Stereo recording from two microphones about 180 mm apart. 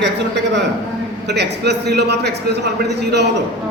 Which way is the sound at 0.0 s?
75° right (ahead or behind).